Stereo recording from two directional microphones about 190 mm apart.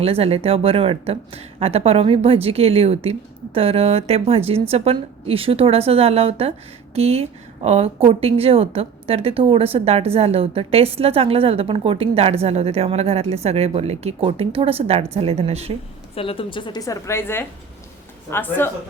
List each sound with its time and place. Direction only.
0.0 s a woman's voice: 30° right (ahead or behind)
16.1 s a woman's voice: 30° left (ahead or behind); by 18.7 s 10° left (ahead or behind)